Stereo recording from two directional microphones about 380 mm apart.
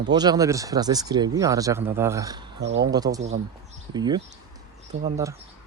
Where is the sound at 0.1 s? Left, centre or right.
Centre.